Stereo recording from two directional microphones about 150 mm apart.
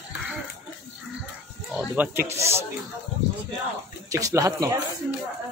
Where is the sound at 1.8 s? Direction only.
15° right (ahead or behind).